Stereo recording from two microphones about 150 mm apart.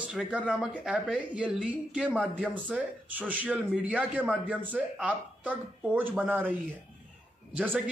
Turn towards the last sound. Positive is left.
turn(degrees=-10)  # may be behind; listen again after turning